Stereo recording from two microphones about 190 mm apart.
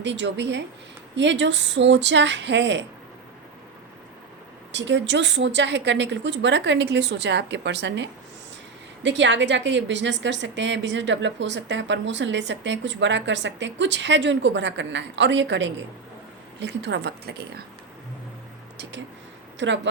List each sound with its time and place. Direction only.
0.0 s a woman's voice: 70° right (ahead or behind)
4.7 s a woman's voice: 70° right (ahead or behind)
19.5 s a woman's voice: 70° right (ahead or behind)